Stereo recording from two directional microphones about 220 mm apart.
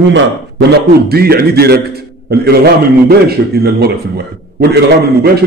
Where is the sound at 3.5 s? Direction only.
45° right (ahead or behind).